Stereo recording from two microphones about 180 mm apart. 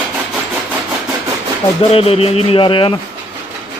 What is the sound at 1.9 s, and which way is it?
Speech, 35° left (ahead or behind).